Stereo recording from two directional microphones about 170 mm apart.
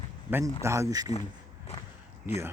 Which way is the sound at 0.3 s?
10° right (ahead or behind).